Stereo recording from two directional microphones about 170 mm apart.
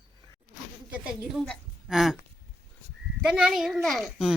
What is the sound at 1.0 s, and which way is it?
A woman's voice, 5° right (ahead or behind).